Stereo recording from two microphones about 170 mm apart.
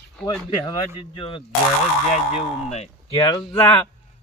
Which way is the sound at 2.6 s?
40° left (ahead or behind).